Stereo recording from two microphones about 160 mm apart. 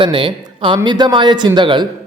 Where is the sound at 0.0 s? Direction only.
30° right (ahead or behind).